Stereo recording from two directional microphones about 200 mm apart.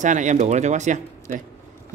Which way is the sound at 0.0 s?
40° right (ahead or behind).